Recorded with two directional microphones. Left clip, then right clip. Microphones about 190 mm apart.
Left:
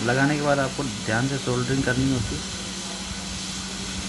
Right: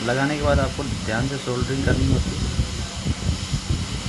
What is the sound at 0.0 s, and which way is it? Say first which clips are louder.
Speech: even; 5° left (ahead or behind).